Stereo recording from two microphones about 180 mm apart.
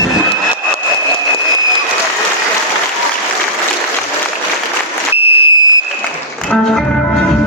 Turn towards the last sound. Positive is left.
turn(degrees=30)  # may be behind; listen again after turning